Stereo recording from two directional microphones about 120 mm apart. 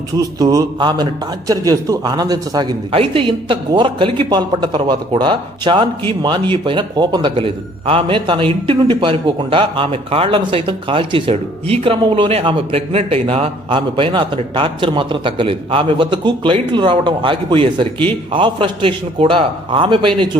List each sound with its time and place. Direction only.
0.2 s speech: 30° right (ahead or behind)
3.0 s a man's voice: 50° right (ahead or behind)